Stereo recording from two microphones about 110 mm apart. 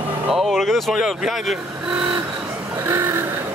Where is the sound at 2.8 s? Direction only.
20° right (ahead or behind).